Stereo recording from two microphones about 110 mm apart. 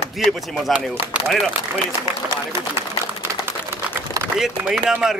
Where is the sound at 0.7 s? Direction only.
20° right (ahead or behind).